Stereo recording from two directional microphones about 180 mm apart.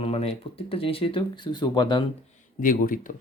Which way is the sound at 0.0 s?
35° left (ahead or behind).